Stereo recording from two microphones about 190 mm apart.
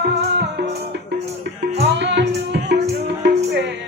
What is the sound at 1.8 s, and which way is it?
Music, 65° right (ahead or behind).